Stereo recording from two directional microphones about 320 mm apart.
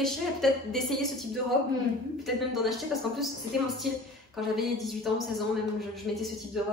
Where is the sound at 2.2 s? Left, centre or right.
Centre.